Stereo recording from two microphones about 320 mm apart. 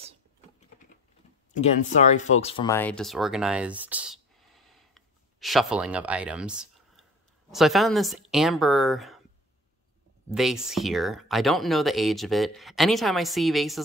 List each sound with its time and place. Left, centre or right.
1.6 s speech: left
2.3 s a sound: centre
7.5 s speech: centre
10.3 s speech: centre